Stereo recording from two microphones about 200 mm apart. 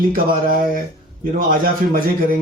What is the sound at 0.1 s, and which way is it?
Speech, 45° right (ahead or behind).